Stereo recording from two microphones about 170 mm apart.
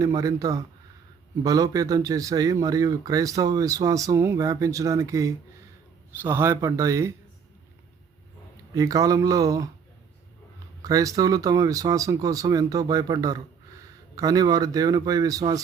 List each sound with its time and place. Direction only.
0.0 s speech: 20° right (ahead or behind)
8.7 s speech: 20° right (ahead or behind)
10.8 s speech: 20° right (ahead or behind)